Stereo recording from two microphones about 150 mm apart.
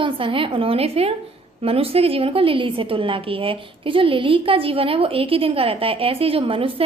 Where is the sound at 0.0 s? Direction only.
35° right (ahead or behind).